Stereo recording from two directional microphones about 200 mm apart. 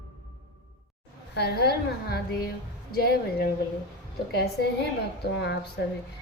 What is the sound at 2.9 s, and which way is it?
Music, 50° left (ahead or behind).